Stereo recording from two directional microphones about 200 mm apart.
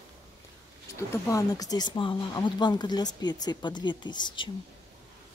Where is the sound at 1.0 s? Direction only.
15° left (ahead or behind).